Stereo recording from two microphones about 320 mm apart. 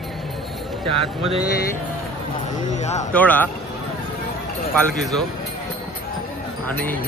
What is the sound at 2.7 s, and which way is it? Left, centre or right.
Speech, left.